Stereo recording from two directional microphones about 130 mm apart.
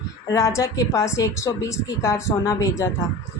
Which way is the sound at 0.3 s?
25° left (ahead or behind).